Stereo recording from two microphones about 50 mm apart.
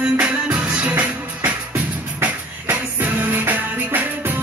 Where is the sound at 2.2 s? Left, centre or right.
Right.